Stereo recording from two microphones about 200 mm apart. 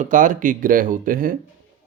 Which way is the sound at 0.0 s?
40° right (ahead or behind).